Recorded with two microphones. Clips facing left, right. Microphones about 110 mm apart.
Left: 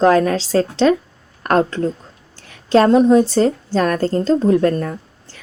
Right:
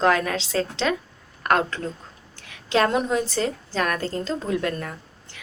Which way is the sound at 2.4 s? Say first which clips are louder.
Left 8 dB; 35° left (ahead or behind).